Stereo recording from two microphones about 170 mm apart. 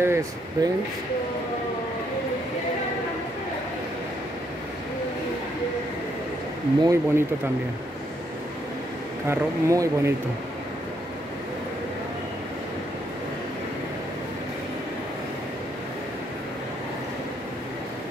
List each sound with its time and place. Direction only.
0.0 s speech: 15° right (ahead or behind)
6.8 s speech: 20° right (ahead or behind)
9.3 s speech: 15° right (ahead or behind)